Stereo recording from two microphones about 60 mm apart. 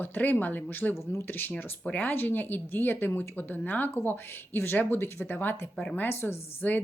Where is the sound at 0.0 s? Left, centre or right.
Left.